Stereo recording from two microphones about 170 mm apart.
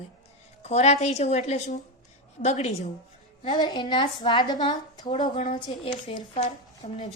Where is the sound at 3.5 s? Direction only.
25° left (ahead or behind).